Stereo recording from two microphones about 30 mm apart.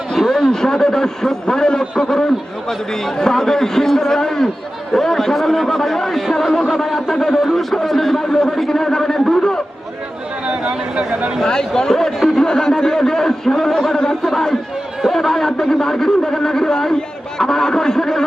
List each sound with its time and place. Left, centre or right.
0.2 s a man's voice: centre
0.5 s speech: centre
7.1 s speech: centre
10.6 s speech: right
11.4 s speech: left